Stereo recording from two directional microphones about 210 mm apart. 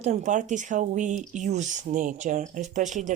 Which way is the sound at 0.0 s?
35° right (ahead or behind).